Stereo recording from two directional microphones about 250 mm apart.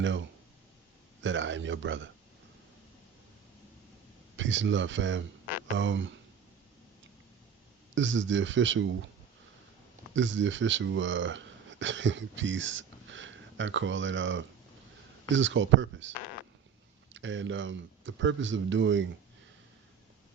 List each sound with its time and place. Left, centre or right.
0.0 s speech: right
4.4 s speech: right
7.9 s speech: right
10.2 s speech: right